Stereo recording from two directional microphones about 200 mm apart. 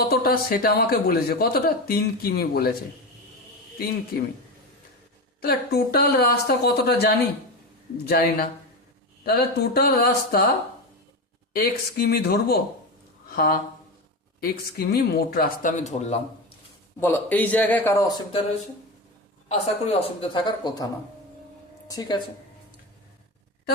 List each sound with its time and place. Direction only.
0.1 s speech: 50° left (ahead or behind)
5.4 s speech: 50° left (ahead or behind)
11.5 s speech: 50° left (ahead or behind); by 16.2 s 35° left (ahead or behind)
17.0 s a man's voice: 10° left (ahead or behind)
19.5 s a woman's voice: 25° left (ahead or behind)